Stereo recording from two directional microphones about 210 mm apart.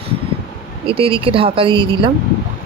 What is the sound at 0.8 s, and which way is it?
Speech, 25° right (ahead or behind).